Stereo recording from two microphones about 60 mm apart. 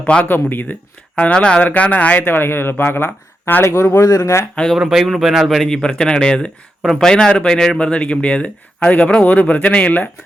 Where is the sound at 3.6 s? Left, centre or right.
Left.